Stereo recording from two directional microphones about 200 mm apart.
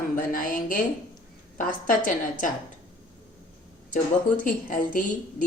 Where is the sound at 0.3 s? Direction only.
40° left (ahead or behind).